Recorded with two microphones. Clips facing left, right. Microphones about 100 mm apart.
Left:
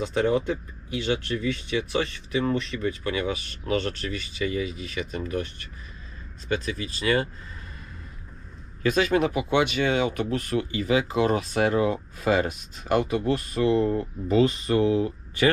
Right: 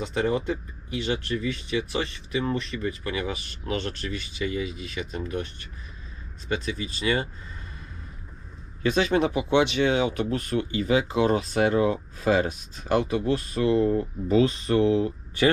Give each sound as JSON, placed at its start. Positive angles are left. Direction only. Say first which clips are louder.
{"t": 0.0, "sound": "speech", "louder": "left 2 dB", "side_deg": 0}
{"t": 6.5, "sound": "speech", "louder": "left 1 dB", "side_deg": 0}
{"t": 8.8, "sound": "speech", "louder": "even", "side_deg": -30}
{"t": 11.1, "sound": "speech", "louder": "right 1 dB", "side_deg": 0}